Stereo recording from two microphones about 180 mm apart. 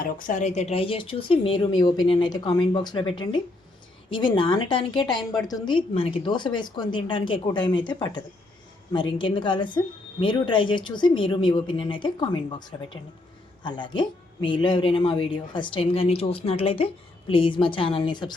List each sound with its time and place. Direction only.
0.0 s speech: 50° left (ahead or behind); by 18.3 s 25° left (ahead or behind)